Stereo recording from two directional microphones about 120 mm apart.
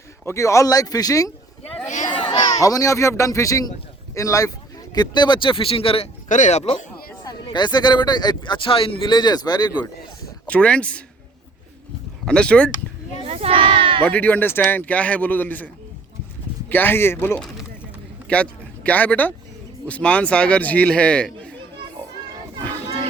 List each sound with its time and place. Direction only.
0.3 s speech: 25° left (ahead or behind)
2.1 s chatter: 40° left (ahead or behind)
2.6 s speech: 30° left (ahead or behind)
4.9 s speech: 40° left (ahead or behind)
6.2 s speech: 90° left; by 6.7 s 70° left (ahead or behind)
7.3 s speech: 40° left (ahead or behind)
10.4 s a man's voice: 10° left (ahead or behind)
12.2 s a man's voice: 5° left (ahead or behind)
13.2 s a sound: 55° right (ahead or behind)
14.0 s a man's voice: 15° left (ahead or behind)